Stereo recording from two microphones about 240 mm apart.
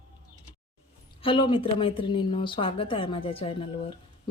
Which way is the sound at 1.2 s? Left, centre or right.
Left.